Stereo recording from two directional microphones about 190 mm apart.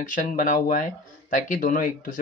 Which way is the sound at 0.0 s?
45° left (ahead or behind).